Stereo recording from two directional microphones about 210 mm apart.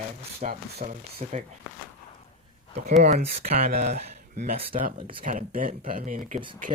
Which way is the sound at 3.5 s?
45° right (ahead or behind).